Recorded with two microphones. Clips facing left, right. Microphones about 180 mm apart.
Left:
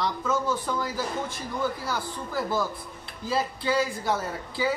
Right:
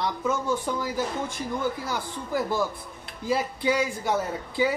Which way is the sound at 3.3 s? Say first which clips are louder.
Right 2 dB; 15° right (ahead or behind).